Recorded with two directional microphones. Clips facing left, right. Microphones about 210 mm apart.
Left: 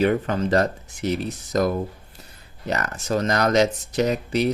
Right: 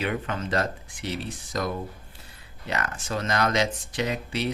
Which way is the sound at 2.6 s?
40° left (ahead or behind).